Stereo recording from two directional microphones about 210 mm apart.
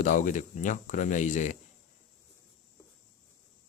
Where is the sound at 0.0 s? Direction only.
35° left (ahead or behind).